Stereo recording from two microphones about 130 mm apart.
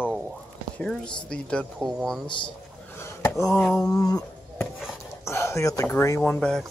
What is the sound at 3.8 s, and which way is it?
Speech, 30° left (ahead or behind).